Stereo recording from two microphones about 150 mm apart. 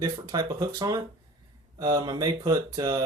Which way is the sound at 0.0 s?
25° right (ahead or behind).